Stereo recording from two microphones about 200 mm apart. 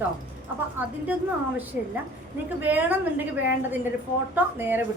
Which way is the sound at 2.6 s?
10° right (ahead or behind).